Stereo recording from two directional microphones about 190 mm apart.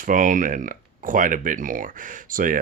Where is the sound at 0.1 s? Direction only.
45° right (ahead or behind).